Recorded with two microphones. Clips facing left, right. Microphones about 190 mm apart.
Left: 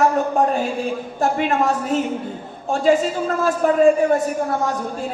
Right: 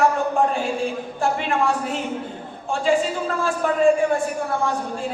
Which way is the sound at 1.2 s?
40° left (ahead or behind).